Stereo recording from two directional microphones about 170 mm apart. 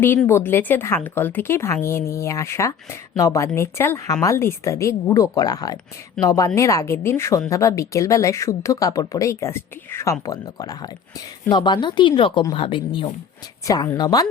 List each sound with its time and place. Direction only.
0.3 s a woman's voice: 15° left (ahead or behind)